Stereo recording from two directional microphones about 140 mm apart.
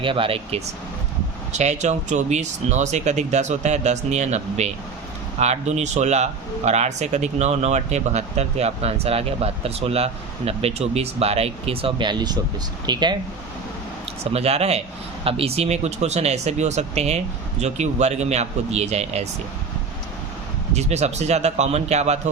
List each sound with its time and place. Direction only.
0.0 s speech: 40° right (ahead or behind)
1.5 s a man's voice: 55° right (ahead or behind); by 13.1 s 30° right (ahead or behind)
14.3 s a man's voice: 50° right (ahead or behind)
20.7 s a man's voice: 55° right (ahead or behind)